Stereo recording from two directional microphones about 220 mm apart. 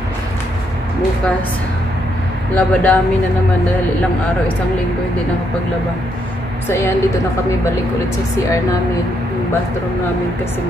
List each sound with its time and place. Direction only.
2.5 s speech: 5° left (ahead or behind)
6.7 s speech: 10° left (ahead or behind)